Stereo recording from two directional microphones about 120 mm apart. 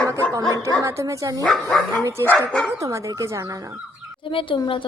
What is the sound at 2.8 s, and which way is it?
Speech, 25° right (ahead or behind).